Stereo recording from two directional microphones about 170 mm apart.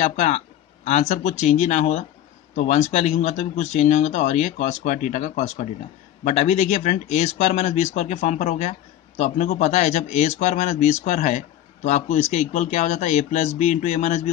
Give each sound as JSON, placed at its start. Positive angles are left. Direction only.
{"t": 0.0, "sound": "speech", "side_deg": 45}